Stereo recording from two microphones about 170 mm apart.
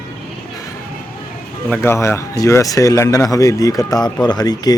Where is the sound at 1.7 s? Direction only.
15° left (ahead or behind).